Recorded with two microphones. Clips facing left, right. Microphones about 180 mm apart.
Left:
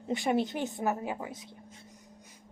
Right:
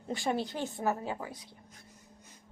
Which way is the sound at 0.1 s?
20° left (ahead or behind).